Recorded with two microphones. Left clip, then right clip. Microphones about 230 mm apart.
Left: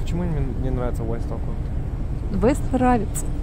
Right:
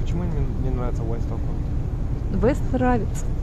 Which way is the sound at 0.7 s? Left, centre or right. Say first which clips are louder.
Left 3 dB; left.